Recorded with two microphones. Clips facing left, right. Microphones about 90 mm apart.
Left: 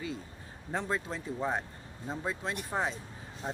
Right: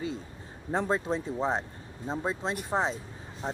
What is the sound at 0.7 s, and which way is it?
Speech, 35° right (ahead or behind).